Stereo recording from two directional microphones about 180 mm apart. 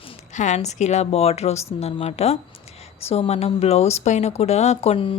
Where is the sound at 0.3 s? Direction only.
40° left (ahead or behind).